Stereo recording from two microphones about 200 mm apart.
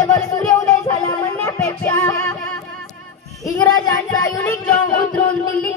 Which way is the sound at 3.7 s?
20° left (ahead or behind).